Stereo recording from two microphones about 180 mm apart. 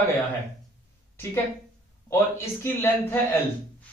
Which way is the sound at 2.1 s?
15° left (ahead or behind).